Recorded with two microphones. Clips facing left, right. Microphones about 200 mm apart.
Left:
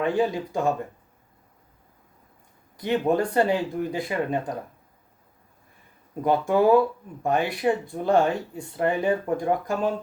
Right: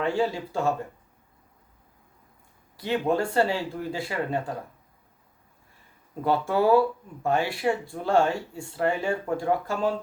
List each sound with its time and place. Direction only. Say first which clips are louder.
0.0 s speech: left 2 dB; 15° left (ahead or behind)
2.7 s speech: left 2 dB; 15° left (ahead or behind)
6.2 s speech: left 3 dB; 15° left (ahead or behind)